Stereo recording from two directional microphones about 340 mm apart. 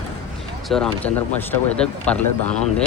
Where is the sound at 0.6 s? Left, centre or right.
Centre.